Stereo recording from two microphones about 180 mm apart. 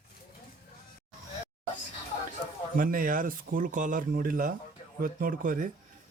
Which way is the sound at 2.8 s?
50° right (ahead or behind).